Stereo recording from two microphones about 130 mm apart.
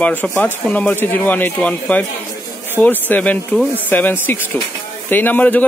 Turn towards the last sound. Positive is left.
turn(degrees=15)  # may be behind; listen again after turning